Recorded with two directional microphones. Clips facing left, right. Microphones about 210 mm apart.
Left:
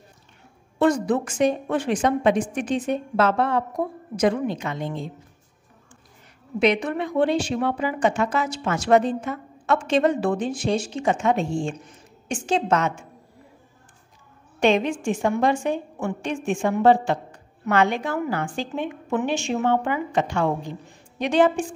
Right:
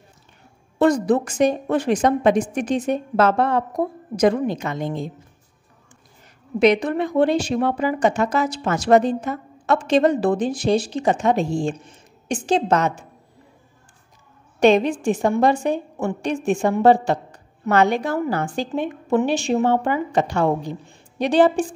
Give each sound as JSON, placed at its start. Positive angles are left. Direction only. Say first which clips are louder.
{"t": 0.7, "sound": "a woman's voice", "louder": "right 3 dB", "side_deg": -40}
{"t": 6.6, "sound": "a woman's voice", "louder": "right 4 dB", "side_deg": -40}
{"t": 14.6, "sound": "a woman's voice", "louder": "right 4 dB", "side_deg": -40}